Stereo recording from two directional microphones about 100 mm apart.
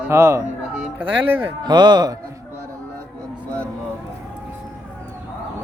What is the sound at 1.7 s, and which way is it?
Speech, 45° right (ahead or behind).